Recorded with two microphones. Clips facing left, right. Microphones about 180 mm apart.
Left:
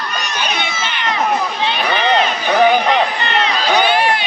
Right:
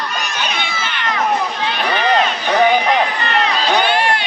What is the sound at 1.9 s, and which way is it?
Run, 20° left (ahead or behind).